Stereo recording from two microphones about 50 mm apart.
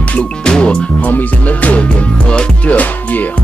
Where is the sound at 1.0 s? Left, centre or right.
Left.